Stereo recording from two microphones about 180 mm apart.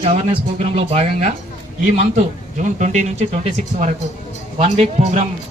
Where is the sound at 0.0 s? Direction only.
30° right (ahead or behind).